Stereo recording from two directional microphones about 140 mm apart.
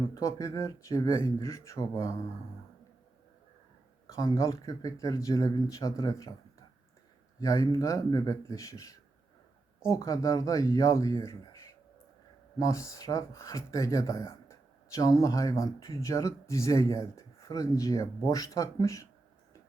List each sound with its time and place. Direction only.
0.0 s speech: 25° left (ahead or behind)
4.0 s speech: 25° left (ahead or behind)
7.3 s speech: 25° left (ahead or behind)